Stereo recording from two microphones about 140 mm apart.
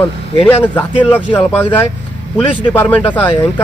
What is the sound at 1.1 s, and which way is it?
Speech, 15° left (ahead or behind).